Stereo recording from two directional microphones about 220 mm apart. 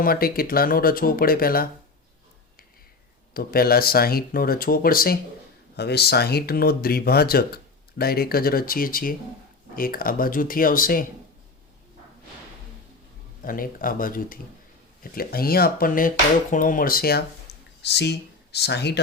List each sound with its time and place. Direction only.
0.0 s speech: 40° left (ahead or behind)
3.3 s speech: 45° left (ahead or behind)
13.4 s speech: 40° left (ahead or behind)